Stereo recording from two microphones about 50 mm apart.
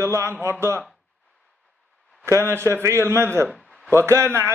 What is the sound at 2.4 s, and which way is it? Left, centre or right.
A man's voice, right.